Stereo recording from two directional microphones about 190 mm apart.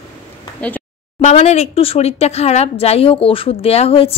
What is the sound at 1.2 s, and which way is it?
Speech, 35° left (ahead or behind).